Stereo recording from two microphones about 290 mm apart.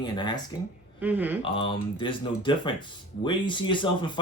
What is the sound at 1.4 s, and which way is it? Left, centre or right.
Speech, centre.